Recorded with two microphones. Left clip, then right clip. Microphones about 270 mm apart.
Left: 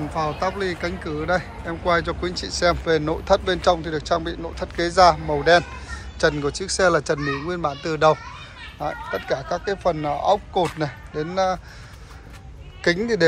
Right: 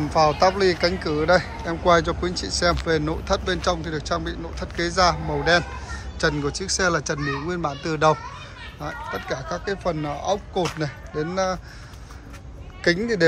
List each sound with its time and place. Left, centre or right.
0.1 s speech: centre
12.8 s speech: centre